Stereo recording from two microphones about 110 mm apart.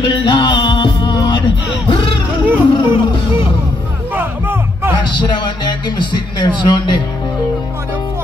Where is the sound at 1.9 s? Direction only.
55° left (ahead or behind).